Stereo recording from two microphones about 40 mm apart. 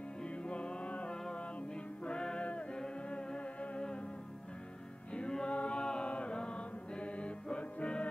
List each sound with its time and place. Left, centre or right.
0.2 s music: left
5.1 s chant: left